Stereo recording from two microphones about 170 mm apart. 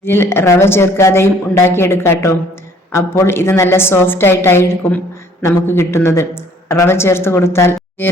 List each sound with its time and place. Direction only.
0.0 s a woman's voice: 15° left (ahead or behind)